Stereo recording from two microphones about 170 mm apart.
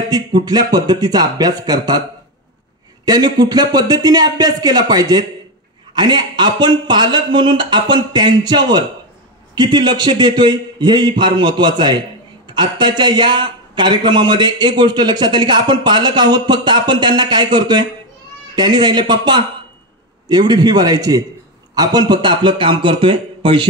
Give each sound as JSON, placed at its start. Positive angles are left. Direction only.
{"t": 0.1, "sound": "speech", "side_deg": -25}
{"t": 3.1, "sound": "speech", "side_deg": -25}